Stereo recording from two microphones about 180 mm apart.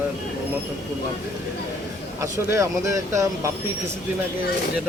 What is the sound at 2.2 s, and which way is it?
Speech, 15° right (ahead or behind).